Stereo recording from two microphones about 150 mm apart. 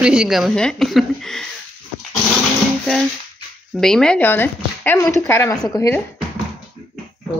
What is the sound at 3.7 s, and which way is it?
Speech, 5° left (ahead or behind).